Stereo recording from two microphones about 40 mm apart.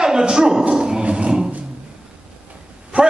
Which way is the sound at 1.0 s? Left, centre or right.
Right.